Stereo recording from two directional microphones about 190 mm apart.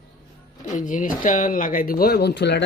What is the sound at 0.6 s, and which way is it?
Speech, 40° left (ahead or behind).